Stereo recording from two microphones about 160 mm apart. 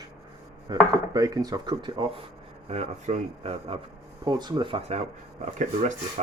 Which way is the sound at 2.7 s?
40° right (ahead or behind).